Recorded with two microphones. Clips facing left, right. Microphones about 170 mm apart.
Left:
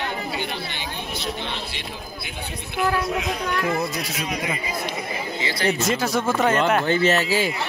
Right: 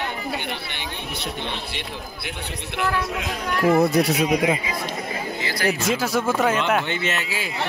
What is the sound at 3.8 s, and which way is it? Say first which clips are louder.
Speech: right 9 dB; 60° right (ahead or behind).